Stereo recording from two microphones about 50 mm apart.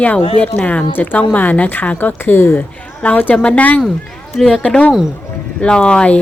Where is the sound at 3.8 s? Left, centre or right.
Centre.